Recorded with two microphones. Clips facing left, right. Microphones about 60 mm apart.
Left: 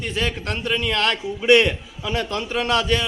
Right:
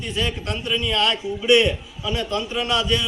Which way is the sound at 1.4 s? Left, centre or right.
Left.